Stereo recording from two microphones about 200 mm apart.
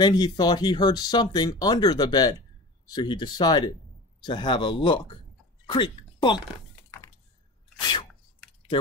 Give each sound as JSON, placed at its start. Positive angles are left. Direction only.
{"t": 0.0, "sound": "speech", "side_deg": 20}